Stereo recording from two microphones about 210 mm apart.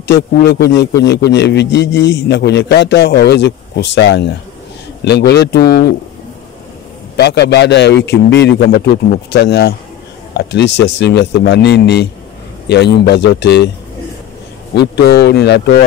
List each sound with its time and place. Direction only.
0.0 s a man's voice: 55° left (ahead or behind)
7.2 s a man's voice: 55° left (ahead or behind)
14.7 s speech: 50° left (ahead or behind)